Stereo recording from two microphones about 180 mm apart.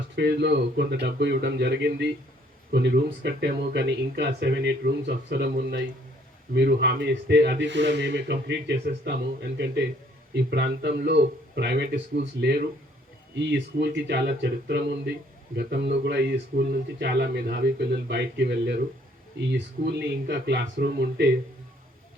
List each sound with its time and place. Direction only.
0.2 s speech: 70° right (ahead or behind)
13.4 s speech: 70° right (ahead or behind)
19.5 s speech: 80° right